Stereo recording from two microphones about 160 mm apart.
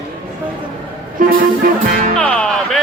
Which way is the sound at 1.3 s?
60° right (ahead or behind).